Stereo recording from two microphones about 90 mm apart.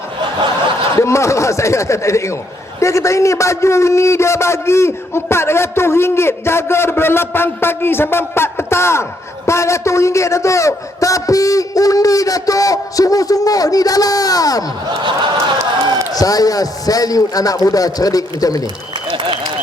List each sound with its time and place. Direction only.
0.9 s a man's voice: 35° left (ahead or behind)
15.0 s speech: 60° right (ahead or behind)
16.1 s a man's voice: 45° left (ahead or behind)
19.1 s applause: 65° right (ahead or behind)